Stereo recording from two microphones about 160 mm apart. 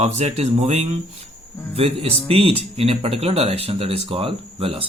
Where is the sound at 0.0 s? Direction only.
40° right (ahead or behind).